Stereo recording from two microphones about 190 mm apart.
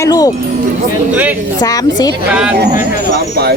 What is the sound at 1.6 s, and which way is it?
Speech, 20° left (ahead or behind).